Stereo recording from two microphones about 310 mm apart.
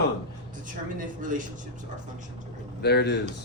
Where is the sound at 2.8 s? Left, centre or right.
Left.